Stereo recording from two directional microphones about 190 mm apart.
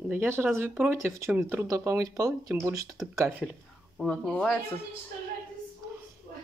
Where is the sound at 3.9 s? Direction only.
5° left (ahead or behind).